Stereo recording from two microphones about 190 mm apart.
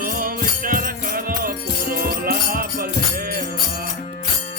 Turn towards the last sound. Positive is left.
turn(degrees=-50)  # may be behind; listen again after turning